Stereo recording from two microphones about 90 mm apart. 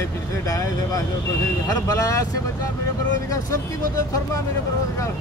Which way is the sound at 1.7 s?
40° left (ahead or behind).